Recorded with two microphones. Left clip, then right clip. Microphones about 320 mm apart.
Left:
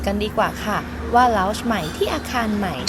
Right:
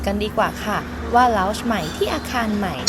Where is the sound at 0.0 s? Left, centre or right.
Centre.